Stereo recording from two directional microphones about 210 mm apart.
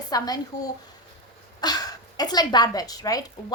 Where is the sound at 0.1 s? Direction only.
15° left (ahead or behind).